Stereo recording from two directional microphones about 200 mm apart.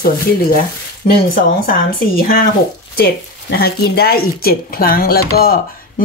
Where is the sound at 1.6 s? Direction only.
45° left (ahead or behind).